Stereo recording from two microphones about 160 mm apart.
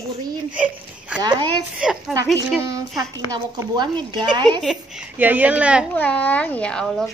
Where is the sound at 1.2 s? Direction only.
25° right (ahead or behind).